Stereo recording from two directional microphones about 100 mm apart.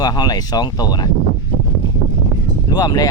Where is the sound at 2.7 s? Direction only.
40° left (ahead or behind).